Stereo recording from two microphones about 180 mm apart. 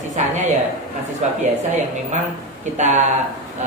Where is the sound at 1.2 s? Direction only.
40° right (ahead or behind).